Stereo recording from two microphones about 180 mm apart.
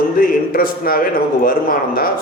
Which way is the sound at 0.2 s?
50° left (ahead or behind).